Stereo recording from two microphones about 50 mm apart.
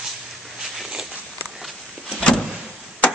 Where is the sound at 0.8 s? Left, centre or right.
Centre.